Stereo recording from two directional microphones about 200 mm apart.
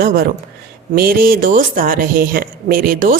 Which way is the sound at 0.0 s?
45° right (ahead or behind).